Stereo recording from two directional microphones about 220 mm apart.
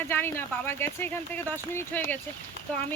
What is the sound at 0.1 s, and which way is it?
Speech, 10° left (ahead or behind).